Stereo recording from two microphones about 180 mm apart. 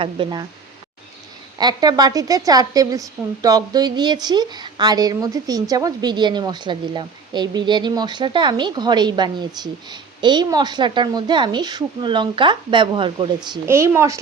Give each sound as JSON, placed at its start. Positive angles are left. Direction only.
{"t": 0.0, "sound": "a woman's voice", "side_deg": -25}
{"t": 1.5, "sound": "a woman's voice", "side_deg": -20}
{"t": 13.7, "sound": "speech", "side_deg": -15}